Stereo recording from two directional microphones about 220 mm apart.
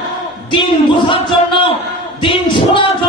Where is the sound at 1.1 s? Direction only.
25° left (ahead or behind).